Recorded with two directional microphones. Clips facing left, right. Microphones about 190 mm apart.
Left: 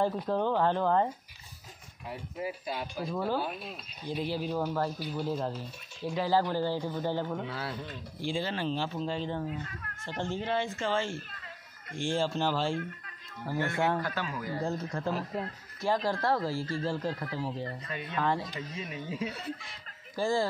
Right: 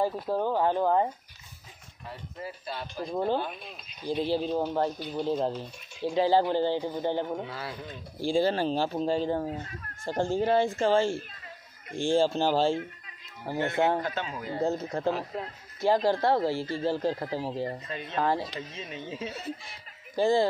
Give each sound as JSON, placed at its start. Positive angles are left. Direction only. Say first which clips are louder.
{"t": 0.0, "sound": "speech", "louder": "right 1 dB", "side_deg": -10}
{"t": 2.0, "sound": "speech", "louder": "left 3 dB", "side_deg": 10}
{"t": 3.1, "sound": "speech", "louder": "right 4 dB", "side_deg": -25}
{"t": 3.3, "sound": "speech", "louder": "right 1 dB", "side_deg": 5}
{"t": 4.0, "sound": "speech", "louder": "right 5 dB", "side_deg": -30}
{"t": 4.9, "sound": "speech", "louder": "right 2 dB", "side_deg": 5}
{"t": 5.2, "sound": "speech", "louder": "right 6 dB", "side_deg": -25}
{"t": 7.4, "sound": "speech", "louder": "left 1 dB", "side_deg": 0}
{"t": 8.2, "sound": "speech", "louder": "right 8 dB", "side_deg": -35}
{"t": 15.0, "sound": "speech", "louder": "right 3 dB", "side_deg": 0}
{"t": 15.8, "sound": "speech", "louder": "right 5 dB", "side_deg": -30}